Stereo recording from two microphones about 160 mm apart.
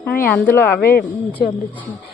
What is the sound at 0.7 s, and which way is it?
Speech, 80° left.